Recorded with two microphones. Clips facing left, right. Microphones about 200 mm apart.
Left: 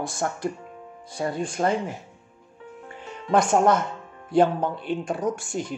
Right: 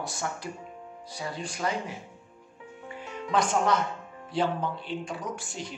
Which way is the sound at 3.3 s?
50° left (ahead or behind).